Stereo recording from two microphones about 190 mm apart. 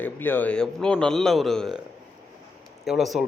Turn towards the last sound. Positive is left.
turn(degrees=0)  # may be behind; listen again after turning